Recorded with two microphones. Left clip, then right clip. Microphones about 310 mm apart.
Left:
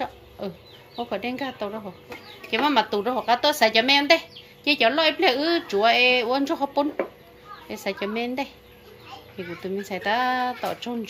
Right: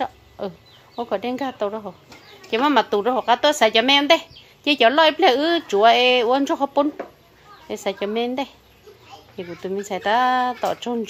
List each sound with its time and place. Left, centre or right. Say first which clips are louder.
0.4 s speech: right 4 dB; centre